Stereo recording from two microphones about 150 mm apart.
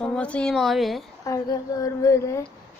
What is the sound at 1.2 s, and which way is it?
Speech, 20° left (ahead or behind).